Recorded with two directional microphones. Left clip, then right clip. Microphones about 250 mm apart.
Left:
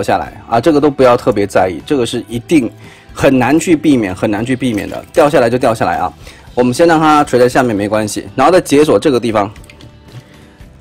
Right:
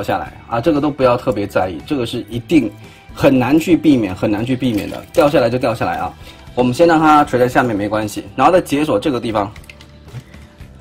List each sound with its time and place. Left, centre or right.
0.0 s speech: left
6.9 s speech: left
7.2 s speech: left